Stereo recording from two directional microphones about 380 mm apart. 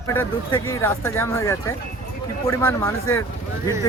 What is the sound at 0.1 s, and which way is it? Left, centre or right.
Speech, centre.